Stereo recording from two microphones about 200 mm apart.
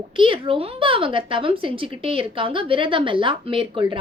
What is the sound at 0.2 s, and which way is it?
A woman's voice, 25° right (ahead or behind).